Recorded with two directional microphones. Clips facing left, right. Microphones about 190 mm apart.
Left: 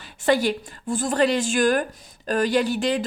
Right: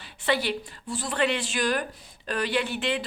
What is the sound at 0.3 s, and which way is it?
A woman's voice, 45° left (ahead or behind).